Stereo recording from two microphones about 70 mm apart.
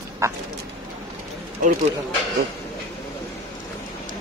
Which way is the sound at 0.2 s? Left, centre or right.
Right.